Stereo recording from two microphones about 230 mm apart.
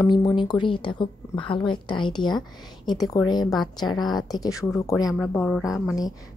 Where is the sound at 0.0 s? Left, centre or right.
Centre.